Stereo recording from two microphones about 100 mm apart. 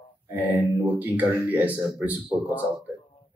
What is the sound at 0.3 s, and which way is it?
Speech, 15° right (ahead or behind).